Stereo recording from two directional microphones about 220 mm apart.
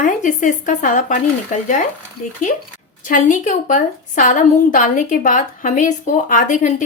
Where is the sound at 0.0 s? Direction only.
35° left (ahead or behind).